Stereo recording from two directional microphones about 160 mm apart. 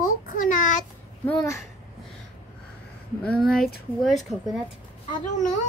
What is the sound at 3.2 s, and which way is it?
Speech, 5° left (ahead or behind).